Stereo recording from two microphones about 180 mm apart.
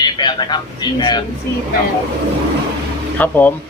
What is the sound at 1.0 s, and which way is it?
Speech, 25° left (ahead or behind).